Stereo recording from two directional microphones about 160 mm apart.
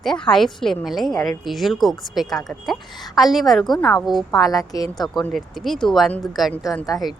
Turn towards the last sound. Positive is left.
turn(degrees=0)  # may be behind; listen again after turning